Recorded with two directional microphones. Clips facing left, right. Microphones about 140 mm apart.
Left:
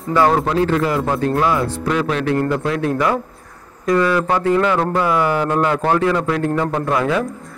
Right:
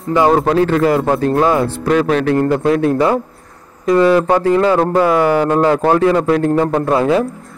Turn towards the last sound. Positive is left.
turn(degrees=-30)  # may be behind; listen again after turning